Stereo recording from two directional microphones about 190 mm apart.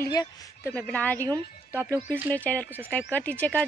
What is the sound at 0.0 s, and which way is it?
Speech, 15° left (ahead or behind).